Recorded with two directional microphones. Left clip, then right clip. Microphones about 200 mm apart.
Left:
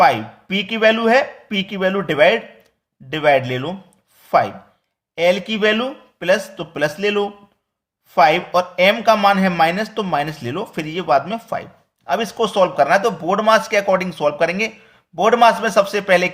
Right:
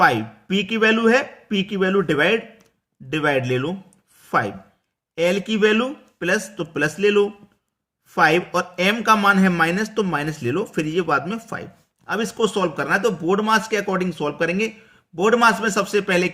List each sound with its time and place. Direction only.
0.0 s speech: 25° right (ahead or behind)
4.2 s a sound: 25° right (ahead or behind)
5.1 s speech: 25° right (ahead or behind)